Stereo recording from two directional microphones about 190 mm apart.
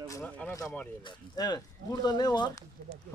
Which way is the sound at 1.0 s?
25° left (ahead or behind).